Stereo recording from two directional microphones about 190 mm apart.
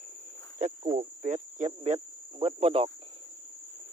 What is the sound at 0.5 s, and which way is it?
Speech, 40° right (ahead or behind).